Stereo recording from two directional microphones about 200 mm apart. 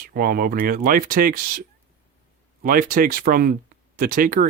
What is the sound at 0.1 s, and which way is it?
Speech, 50° right (ahead or behind).